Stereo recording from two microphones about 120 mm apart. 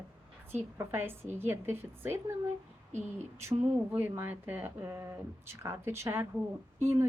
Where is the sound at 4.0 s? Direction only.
20° right (ahead or behind).